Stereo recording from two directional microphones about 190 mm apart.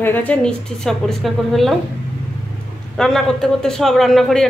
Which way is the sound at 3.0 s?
Centre (ahead or behind).